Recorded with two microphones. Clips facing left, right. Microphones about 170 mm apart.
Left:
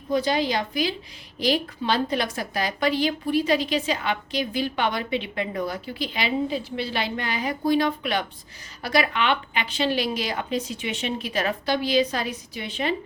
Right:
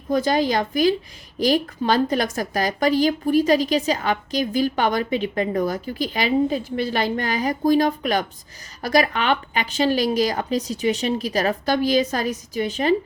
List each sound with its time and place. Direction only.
0.1 s a woman's voice: 45° right (ahead or behind)